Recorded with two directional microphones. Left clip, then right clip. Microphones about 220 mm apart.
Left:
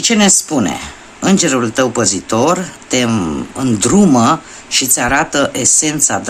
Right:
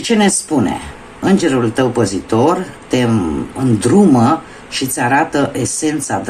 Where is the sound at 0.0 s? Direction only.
30° left (ahead or behind).